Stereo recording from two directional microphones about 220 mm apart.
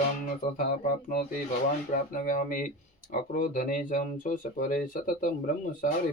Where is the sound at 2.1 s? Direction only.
35° left (ahead or behind).